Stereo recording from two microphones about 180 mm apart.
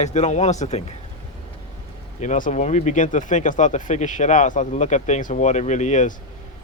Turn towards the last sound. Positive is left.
turn(degrees=45)  # may be behind; listen again after turning